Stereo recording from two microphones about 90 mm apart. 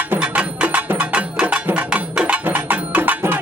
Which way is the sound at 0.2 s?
15° right (ahead or behind).